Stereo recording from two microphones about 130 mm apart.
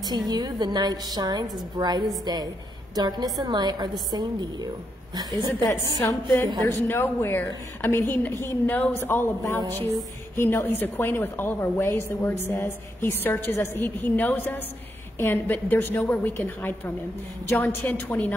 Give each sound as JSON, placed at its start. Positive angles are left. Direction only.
{"t": 0.3, "sound": "a woman's voice", "side_deg": -30}
{"t": 5.9, "sound": "a woman's voice", "side_deg": 25}